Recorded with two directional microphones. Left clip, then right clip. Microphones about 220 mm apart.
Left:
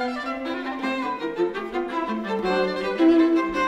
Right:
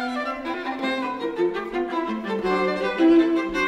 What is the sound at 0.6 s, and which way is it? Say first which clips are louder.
Violin: right 2 dB; 10° right (ahead or behind).